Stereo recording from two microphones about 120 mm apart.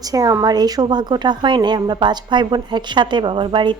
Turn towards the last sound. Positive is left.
turn(degrees=-45)  # may be behind; listen again after turning